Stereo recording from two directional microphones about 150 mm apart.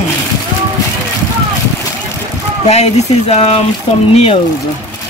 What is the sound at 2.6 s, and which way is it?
Speech, 45° left (ahead or behind).